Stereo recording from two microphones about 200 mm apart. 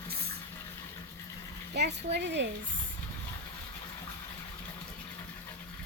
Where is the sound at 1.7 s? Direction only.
55° right (ahead or behind).